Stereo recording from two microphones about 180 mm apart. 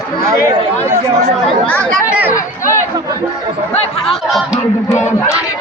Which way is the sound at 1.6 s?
5° left (ahead or behind).